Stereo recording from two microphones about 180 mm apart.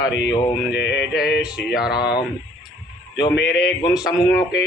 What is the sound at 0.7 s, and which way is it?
Speech, 75° left (ahead or behind).